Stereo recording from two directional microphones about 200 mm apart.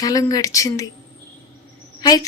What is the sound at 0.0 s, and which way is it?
Speech, 15° left (ahead or behind).